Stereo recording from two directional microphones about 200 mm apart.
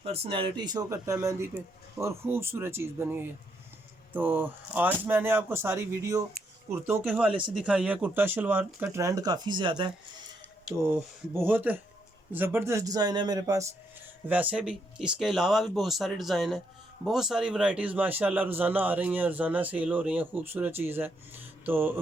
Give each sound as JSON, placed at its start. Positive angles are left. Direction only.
{"t": 0.0, "sound": "a man's voice", "side_deg": -30}
{"t": 11.3, "sound": "a man's voice", "side_deg": -10}
{"t": 14.3, "sound": "a man's voice", "side_deg": -5}
{"t": 21.6, "sound": "a sound", "side_deg": -10}